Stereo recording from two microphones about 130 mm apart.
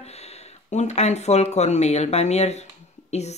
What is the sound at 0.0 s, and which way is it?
Speech, 55° left (ahead or behind).